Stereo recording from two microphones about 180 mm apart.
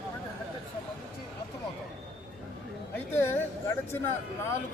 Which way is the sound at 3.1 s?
10° left (ahead or behind).